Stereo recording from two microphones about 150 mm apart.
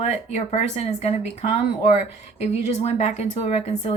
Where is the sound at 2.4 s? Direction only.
45° left (ahead or behind).